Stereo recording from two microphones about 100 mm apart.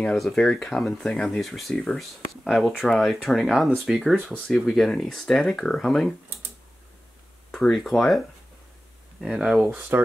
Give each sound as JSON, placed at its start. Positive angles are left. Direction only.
{"t": 0.0, "sound": "speech", "side_deg": 5}
{"t": 7.5, "sound": "speech", "side_deg": 5}
{"t": 9.2, "sound": "speech", "side_deg": -5}
{"t": 9.8, "sound": "speech", "side_deg": -20}